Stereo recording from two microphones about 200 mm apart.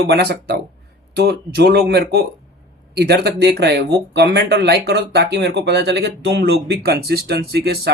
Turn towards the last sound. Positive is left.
turn(degrees=-55)  # may be behind; listen again after turning